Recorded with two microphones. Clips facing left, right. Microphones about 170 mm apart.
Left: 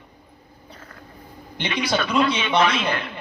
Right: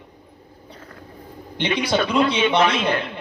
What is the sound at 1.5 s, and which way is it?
A man's voice, 25° right (ahead or behind).